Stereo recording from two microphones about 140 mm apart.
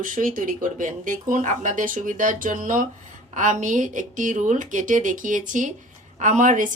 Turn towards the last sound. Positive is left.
turn(degrees=-65)  # may be behind; listen again after turning